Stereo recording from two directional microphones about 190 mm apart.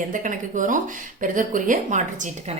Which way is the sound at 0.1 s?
45° right (ahead or behind).